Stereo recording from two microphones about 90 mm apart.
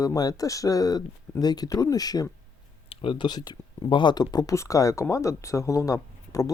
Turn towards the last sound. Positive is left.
turn(degrees=40)  # may be behind; listen again after turning